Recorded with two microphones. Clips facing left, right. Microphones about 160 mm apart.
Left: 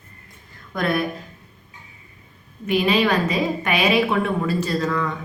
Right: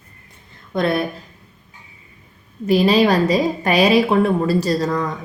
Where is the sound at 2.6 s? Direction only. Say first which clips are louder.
Right 5 dB; 35° right (ahead or behind).